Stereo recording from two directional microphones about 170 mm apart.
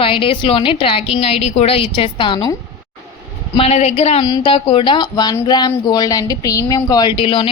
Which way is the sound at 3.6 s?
40° left (ahead or behind).